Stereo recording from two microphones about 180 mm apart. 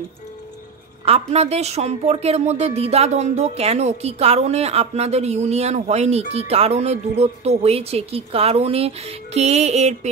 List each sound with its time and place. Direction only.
1.0 s a woman's voice: 35° right (ahead or behind)